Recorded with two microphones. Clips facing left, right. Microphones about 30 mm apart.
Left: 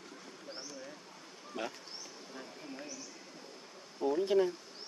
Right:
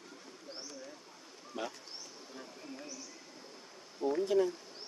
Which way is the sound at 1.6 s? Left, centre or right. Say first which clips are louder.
Even; centre.